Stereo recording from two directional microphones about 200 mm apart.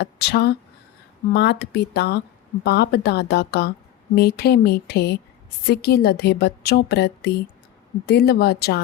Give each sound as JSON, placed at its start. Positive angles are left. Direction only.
{"t": 0.0, "sound": "a woman's voice", "side_deg": 55}